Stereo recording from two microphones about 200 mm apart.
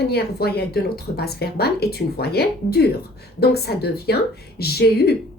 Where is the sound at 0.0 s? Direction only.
55° left (ahead or behind).